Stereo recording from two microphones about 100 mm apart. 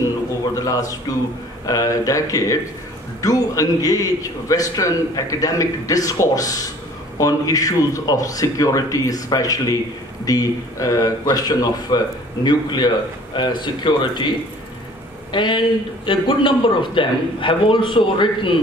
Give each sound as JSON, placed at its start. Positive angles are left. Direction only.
{"t": 0.6, "sound": "a man's voice", "side_deg": 35}
{"t": 15.3, "sound": "a man's voice", "side_deg": 50}